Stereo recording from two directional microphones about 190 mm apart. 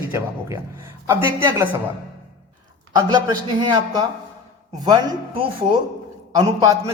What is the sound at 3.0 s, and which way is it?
Speech, 20° right (ahead or behind).